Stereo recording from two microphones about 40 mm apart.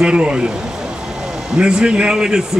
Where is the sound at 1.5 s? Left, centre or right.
Right.